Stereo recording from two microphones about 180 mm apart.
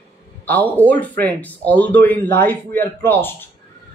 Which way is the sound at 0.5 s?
10° left (ahead or behind).